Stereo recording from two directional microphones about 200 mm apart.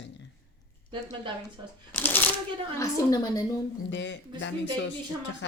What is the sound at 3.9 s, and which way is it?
Speech, 65° left (ahead or behind).